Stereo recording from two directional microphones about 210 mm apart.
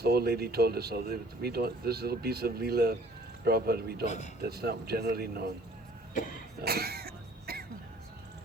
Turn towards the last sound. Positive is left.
turn(degrees=-45)  # may be behind; listen again after turning